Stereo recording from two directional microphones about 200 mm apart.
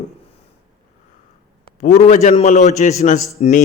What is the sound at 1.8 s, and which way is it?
A man's voice, 35° left (ahead or behind).